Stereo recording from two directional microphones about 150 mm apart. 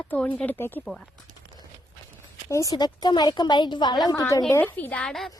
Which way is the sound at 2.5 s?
20° left (ahead or behind).